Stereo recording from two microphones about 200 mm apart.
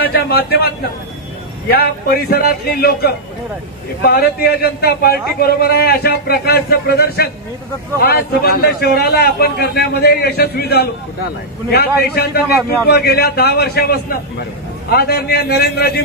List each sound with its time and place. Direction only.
0.0 s a man's voice: 50° left (ahead or behind)
12.2 s a man's voice: 50° left (ahead or behind)